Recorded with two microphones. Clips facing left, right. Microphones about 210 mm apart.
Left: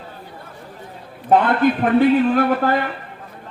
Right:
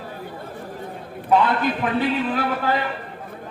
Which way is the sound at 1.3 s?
55° left (ahead or behind).